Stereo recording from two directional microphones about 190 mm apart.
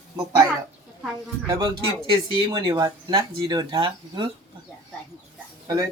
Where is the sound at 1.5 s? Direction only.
20° right (ahead or behind).